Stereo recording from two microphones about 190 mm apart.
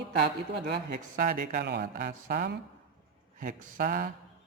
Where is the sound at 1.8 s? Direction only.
45° right (ahead or behind).